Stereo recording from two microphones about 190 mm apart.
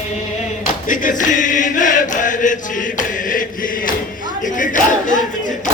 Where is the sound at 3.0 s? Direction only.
45° left (ahead or behind).